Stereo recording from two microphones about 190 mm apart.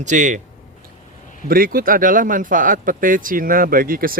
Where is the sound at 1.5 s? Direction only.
50° right (ahead or behind).